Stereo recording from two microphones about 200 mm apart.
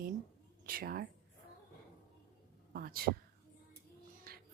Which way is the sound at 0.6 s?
45° right (ahead or behind).